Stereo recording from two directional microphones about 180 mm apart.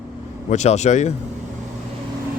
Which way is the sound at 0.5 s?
40° left (ahead or behind).